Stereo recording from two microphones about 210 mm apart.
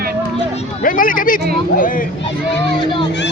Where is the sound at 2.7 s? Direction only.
20° left (ahead or behind).